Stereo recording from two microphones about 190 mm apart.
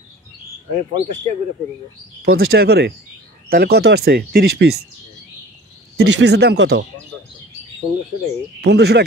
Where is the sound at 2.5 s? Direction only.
55° right (ahead or behind).